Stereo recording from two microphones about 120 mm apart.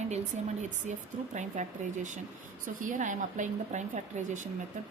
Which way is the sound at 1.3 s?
90° right.